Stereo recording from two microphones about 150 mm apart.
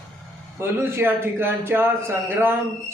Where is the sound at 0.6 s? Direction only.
15° right (ahead or behind).